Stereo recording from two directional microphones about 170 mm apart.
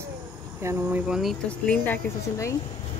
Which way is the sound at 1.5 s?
5° left (ahead or behind).